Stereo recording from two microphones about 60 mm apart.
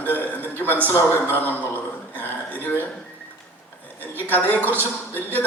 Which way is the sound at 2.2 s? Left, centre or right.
Left.